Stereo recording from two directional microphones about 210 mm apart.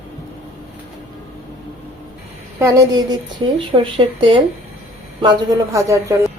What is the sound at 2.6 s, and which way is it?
A man's voice, 15° right (ahead or behind).